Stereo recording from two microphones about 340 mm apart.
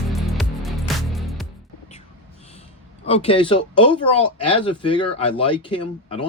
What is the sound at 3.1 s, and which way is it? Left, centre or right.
Speech, centre.